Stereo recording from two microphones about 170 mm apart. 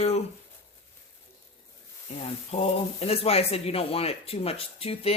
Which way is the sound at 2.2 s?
35° left (ahead or behind).